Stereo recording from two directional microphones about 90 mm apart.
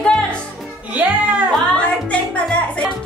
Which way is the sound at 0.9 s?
15° right (ahead or behind).